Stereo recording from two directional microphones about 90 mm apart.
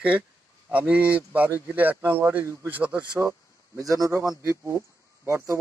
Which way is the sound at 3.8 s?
40° right (ahead or behind).